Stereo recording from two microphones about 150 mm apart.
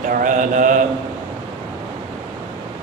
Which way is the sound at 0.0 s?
60° right (ahead or behind).